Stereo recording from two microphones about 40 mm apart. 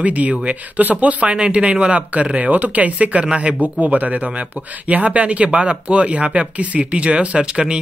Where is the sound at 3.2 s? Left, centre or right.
Right.